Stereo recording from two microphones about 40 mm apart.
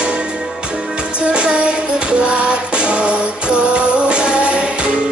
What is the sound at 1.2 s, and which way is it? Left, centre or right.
Music, right.